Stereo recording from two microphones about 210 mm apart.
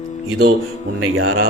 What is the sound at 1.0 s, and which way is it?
Speech, 80° right.